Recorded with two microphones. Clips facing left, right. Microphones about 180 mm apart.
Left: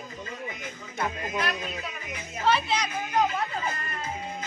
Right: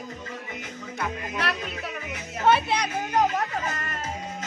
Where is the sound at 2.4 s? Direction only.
60° right (ahead or behind).